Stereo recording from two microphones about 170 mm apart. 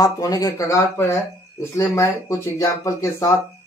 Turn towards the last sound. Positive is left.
turn(degrees=20)  # may be behind; listen again after turning